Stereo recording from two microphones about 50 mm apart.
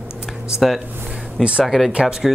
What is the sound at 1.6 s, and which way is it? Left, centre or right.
Speech, centre.